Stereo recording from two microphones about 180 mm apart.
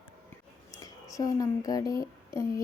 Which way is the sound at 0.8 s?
20° left (ahead or behind).